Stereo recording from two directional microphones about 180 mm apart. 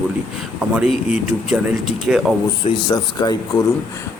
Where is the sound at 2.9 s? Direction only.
25° left (ahead or behind).